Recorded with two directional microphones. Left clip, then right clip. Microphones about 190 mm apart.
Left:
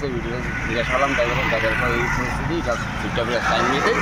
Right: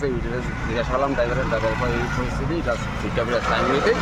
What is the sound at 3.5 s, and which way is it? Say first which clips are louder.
Speech: left 1 dB; 40° right (ahead or behind).